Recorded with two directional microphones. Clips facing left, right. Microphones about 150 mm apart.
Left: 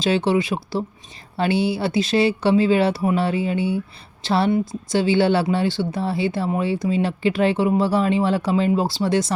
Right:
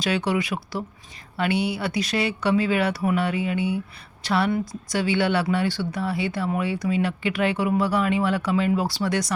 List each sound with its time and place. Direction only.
0.0 s speech: 25° left (ahead or behind)